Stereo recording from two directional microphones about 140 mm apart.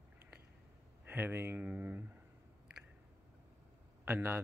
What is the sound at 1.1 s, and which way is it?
Speech, 15° right (ahead or behind).